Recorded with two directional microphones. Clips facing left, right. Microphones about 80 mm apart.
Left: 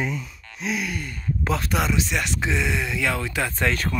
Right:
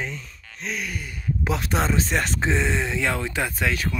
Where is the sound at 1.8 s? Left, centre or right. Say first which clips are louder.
Right 1 dB; right.